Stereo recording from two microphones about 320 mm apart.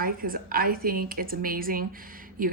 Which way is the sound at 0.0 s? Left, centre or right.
Right.